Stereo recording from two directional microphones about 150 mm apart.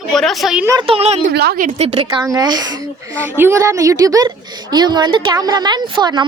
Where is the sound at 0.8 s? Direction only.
40° right (ahead or behind).